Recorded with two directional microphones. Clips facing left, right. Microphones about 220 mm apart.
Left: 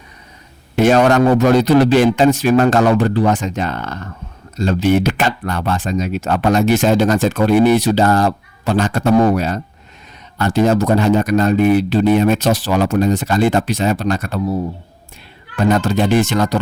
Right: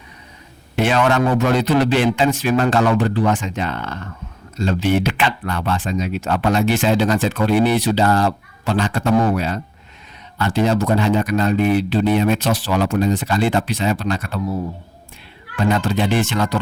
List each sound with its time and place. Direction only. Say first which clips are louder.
0.8 s speech: left 5 dB; 40° left (ahead or behind)
15.5 s speech: left 4 dB; 45° left (ahead or behind)